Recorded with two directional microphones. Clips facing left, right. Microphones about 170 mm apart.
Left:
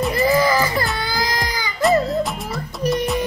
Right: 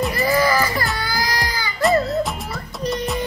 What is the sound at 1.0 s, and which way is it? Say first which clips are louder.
Baby cry: left 1 dB; 20° left (ahead or behind).